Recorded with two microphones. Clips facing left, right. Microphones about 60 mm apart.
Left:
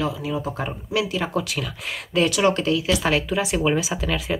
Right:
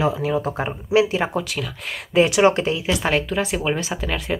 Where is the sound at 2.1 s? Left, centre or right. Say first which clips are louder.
Right 4 dB; right.